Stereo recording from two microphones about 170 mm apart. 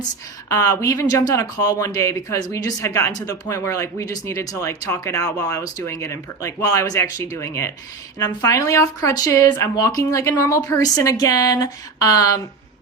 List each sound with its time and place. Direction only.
0.4 s speech: 20° left (ahead or behind)